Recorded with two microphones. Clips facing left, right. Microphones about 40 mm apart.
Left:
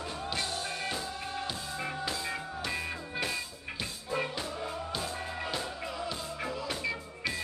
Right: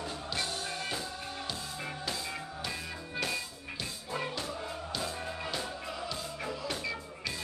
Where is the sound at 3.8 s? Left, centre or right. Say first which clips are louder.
Left 3 dB; centre.